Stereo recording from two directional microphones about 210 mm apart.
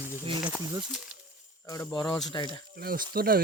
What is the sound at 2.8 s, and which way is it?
Speech, 45° right (ahead or behind).